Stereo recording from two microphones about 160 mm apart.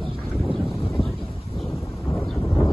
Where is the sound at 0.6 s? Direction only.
Centre (ahead or behind).